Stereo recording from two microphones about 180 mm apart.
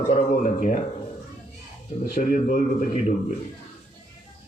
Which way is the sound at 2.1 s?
50° left (ahead or behind).